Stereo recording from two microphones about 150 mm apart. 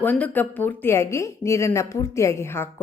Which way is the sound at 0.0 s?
10° left (ahead or behind).